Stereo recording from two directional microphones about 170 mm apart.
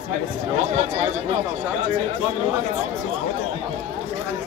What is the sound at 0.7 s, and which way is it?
Speech, 40° right (ahead or behind).